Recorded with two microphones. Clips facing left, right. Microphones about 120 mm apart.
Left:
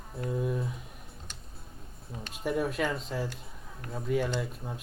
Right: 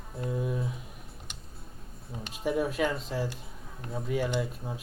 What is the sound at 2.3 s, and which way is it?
Speech, centre (ahead or behind).